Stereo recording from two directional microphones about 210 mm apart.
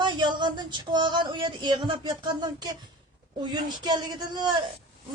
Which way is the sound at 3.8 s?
20° right (ahead or behind).